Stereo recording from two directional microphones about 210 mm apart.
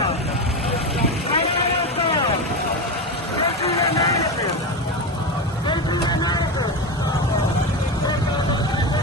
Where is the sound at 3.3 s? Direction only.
30° left (ahead or behind).